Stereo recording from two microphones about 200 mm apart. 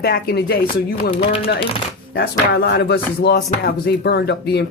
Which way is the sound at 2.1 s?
50° left (ahead or behind).